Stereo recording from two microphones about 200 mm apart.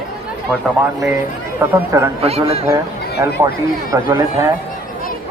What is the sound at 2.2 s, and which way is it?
Speech, 30° right (ahead or behind).